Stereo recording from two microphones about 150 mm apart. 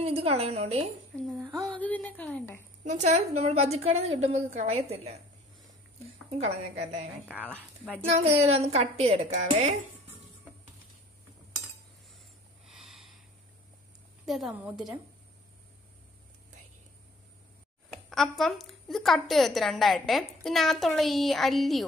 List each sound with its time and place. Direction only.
0.0 s a woman's voice: 40° right (ahead or behind)
1.8 s a woman's voice: 10° left (ahead or behind)
2.8 s a woman's voice: 50° right (ahead or behind)
6.3 s a woman's voice: 45° right (ahead or behind)
8.1 s a woman's voice: 40° right (ahead or behind)
12.6 s a sound: centre (ahead or behind)
14.2 s a woman's voice: centre (ahead or behind)
14.5 s a woman's voice: 10° right (ahead or behind)
17.8 s a woman's voice: centre (ahead or behind)